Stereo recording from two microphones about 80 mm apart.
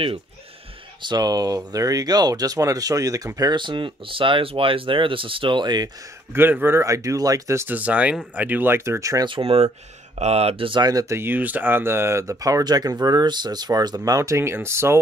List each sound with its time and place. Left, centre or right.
1.0 s speech: right
3.5 s speech: right
6.3 s a man's voice: right
6.8 s speech: right
7.6 s speech: centre; by 9.2 s right
10.6 s speech: right
10.9 s speech: right
11.1 s speech: right